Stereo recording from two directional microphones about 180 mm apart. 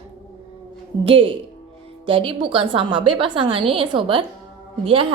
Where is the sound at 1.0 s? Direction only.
30° right (ahead or behind).